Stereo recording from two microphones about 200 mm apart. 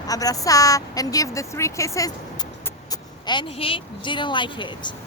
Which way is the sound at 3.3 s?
25° left (ahead or behind).